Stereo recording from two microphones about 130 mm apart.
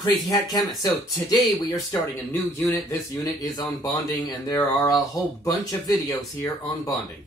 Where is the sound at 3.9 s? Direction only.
30° left (ahead or behind).